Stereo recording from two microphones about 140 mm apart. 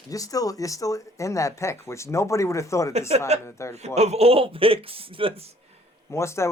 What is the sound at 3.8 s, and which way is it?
A man's voice, 50° right (ahead or behind).